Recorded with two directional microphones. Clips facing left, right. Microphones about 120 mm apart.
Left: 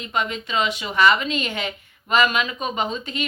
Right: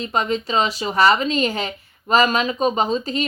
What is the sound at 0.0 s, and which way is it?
A woman's voice, 35° right (ahead or behind).